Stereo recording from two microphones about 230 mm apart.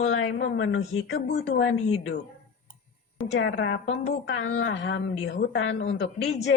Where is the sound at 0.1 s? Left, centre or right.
Left.